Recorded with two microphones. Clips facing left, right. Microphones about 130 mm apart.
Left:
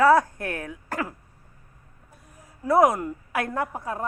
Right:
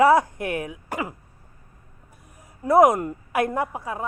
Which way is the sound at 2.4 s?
15° right (ahead or behind).